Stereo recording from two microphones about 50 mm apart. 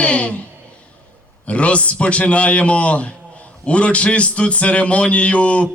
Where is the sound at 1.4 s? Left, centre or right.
Left.